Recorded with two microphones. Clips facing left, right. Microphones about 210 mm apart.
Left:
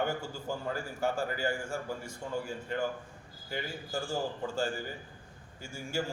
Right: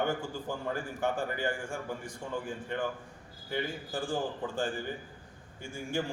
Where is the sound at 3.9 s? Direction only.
15° right (ahead or behind).